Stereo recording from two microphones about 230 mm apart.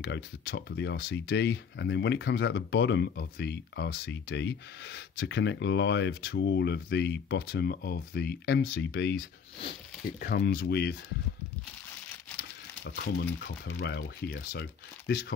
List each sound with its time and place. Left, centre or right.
0.0 s speech: left
10.2 s speech: left
12.8 s speech: left